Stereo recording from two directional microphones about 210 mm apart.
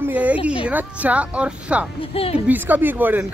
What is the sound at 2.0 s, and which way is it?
Speech, 25° left (ahead or behind).